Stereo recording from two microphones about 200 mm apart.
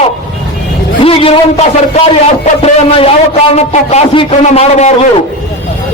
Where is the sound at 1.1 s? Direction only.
30° left (ahead or behind).